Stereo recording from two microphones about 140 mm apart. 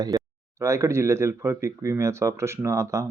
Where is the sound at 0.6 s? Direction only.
20° right (ahead or behind).